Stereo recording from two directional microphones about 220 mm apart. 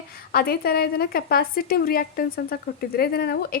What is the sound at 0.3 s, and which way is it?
A woman's voice, 45° left (ahead or behind).